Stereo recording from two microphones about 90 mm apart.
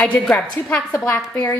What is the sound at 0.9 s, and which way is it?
Speech, 30° left (ahead or behind).